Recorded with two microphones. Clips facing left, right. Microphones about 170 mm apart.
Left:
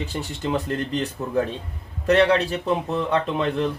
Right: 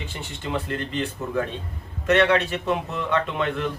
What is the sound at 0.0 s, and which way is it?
Speech, 40° left (ahead or behind).